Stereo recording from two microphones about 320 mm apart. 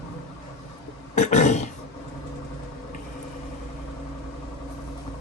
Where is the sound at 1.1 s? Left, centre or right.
Left.